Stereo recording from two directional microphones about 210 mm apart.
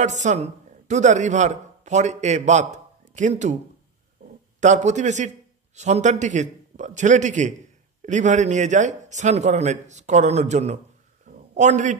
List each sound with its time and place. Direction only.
0.0 s speech: 35° right (ahead or behind)
4.6 s a man's voice: 35° right (ahead or behind)
11.2 s a sound: 35° right (ahead or behind)